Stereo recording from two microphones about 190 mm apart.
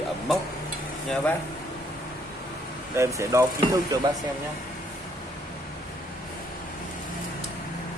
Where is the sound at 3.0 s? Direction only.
15° right (ahead or behind).